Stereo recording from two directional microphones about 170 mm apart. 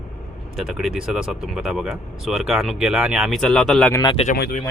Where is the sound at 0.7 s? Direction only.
Centre (ahead or behind).